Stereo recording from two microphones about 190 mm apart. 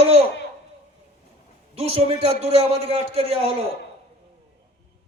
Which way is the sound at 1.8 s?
30° right (ahead or behind).